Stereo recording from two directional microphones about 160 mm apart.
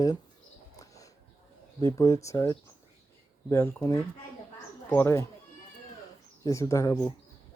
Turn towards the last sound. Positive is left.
turn(degrees=20)  # may be behind; listen again after turning